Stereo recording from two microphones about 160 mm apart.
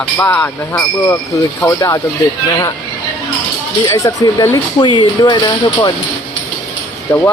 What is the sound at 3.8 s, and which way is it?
Speech, 20° left (ahead or behind).